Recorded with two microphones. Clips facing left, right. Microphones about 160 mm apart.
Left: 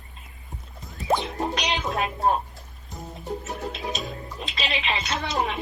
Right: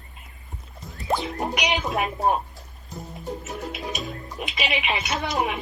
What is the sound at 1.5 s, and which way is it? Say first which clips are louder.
Speech: right 2 dB; 15° right (ahead or behind).